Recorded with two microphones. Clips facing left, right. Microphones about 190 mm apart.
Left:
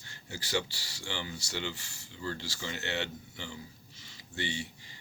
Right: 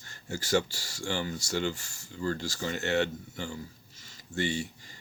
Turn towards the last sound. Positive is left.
turn(degrees=-45)  # may be behind; listen again after turning